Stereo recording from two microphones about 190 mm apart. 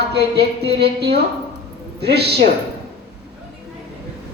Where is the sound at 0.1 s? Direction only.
60° right (ahead or behind).